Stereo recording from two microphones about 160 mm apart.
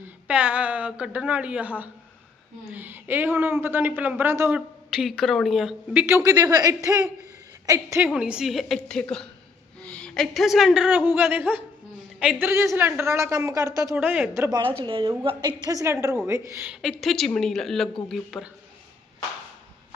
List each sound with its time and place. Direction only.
0.0 s a woman's voice: 10° right (ahead or behind)
4.9 s a woman's voice: centre (ahead or behind); by 13.9 s 20° right (ahead or behind)
13.9 s a woman's voice: 10° right (ahead or behind)
14.5 s a woman's voice: 30° right (ahead or behind); by 16.7 s 15° right (ahead or behind)
16.8 s a woman's voice: centre (ahead or behind)